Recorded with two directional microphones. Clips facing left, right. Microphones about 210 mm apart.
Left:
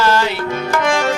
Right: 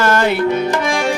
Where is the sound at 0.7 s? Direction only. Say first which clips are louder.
Even; 10° right (ahead or behind).